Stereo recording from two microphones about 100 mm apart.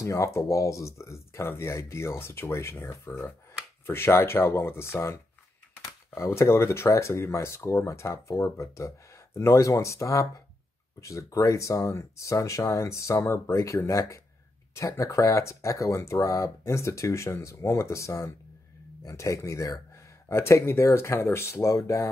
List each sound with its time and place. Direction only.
0.0 s speech: 30° left (ahead or behind)